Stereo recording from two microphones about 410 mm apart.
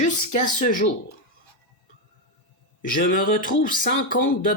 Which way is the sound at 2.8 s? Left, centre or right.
Centre.